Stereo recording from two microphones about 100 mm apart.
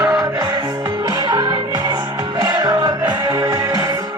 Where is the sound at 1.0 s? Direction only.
45° right (ahead or behind).